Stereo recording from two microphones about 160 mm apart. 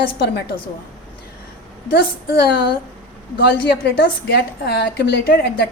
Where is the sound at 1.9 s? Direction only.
90° left.